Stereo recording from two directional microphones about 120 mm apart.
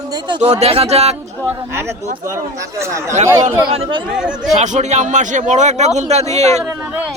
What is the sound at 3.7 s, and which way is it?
Speech, 50° right (ahead or behind).